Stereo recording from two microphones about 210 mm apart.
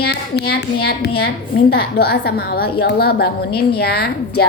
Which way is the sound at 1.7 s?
50° left (ahead or behind).